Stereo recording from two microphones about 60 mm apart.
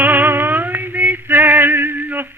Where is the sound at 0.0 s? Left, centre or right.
Right.